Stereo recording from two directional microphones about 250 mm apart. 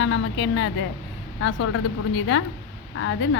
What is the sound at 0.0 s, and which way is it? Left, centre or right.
A woman's voice, left.